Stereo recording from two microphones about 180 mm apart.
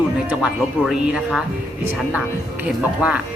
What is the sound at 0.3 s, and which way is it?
Speech, 5° right (ahead or behind).